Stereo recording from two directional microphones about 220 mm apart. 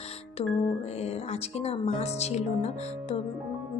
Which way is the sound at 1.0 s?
30° left (ahead or behind).